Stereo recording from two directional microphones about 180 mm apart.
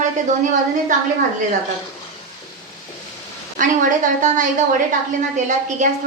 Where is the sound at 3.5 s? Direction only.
45° right (ahead or behind).